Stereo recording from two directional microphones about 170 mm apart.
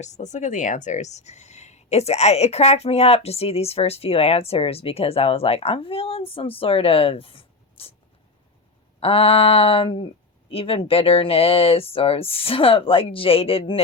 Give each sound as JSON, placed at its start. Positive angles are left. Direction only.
{"t": 0.0, "sound": "speech", "side_deg": 45}
{"t": 9.0, "sound": "speech", "side_deg": 35}